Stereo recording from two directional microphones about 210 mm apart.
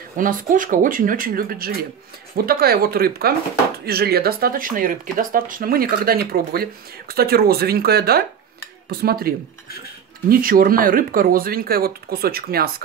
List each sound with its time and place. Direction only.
0.2 s speech: 40° right (ahead or behind)
10.3 s speech: 45° right (ahead or behind)